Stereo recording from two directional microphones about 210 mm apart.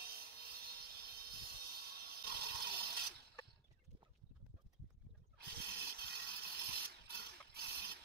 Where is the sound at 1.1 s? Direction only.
45° right (ahead or behind).